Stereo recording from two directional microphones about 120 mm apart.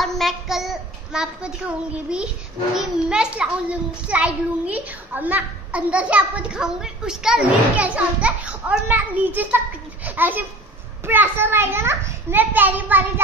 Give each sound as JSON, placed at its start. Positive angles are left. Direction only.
{"t": 0.0, "sound": "child singing", "side_deg": 0}
{"t": 2.7, "sound": "a child's voice", "side_deg": -5}